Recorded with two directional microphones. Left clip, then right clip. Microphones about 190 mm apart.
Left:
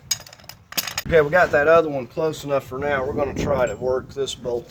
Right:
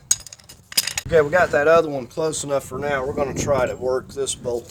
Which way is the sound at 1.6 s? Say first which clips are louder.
Even; 45° right (ahead or behind).